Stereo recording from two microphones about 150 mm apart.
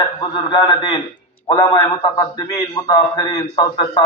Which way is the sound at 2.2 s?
25° left (ahead or behind).